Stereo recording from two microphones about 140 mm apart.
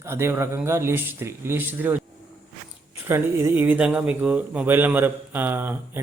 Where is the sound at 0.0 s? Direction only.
20° right (ahead or behind).